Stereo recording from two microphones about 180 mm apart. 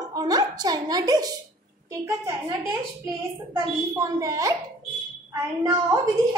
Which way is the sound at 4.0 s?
15° right (ahead or behind).